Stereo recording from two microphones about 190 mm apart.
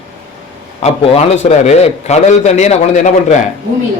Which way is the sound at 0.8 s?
30° left (ahead or behind).